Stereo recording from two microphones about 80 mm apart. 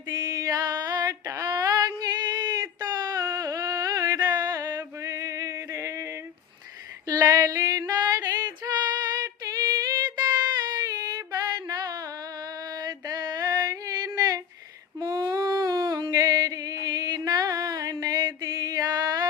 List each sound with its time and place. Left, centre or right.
0.1 s female singing: right
7.1 s female singing: right
11.5 s a sound: right